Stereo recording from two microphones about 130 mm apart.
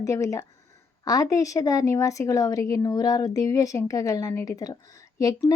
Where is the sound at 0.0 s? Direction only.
25° left (ahead or behind).